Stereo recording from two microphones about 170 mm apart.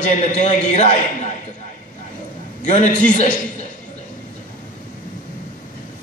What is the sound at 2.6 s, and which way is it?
Speech, 45° left (ahead or behind).